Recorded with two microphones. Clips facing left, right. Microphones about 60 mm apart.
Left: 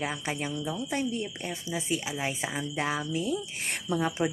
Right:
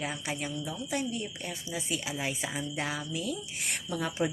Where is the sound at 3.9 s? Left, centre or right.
Left.